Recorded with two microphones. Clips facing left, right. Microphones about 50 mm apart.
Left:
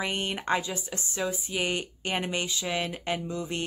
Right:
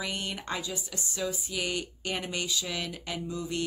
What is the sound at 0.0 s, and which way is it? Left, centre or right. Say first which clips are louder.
Speech: left 4 dB; left.